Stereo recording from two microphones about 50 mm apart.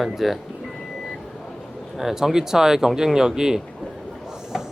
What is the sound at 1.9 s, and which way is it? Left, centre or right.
Speech, centre.